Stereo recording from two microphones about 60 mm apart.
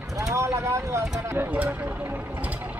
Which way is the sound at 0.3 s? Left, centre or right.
Right.